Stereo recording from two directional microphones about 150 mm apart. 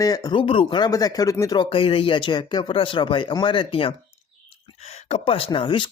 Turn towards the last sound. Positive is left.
turn(degrees=35)  # may be behind; listen again after turning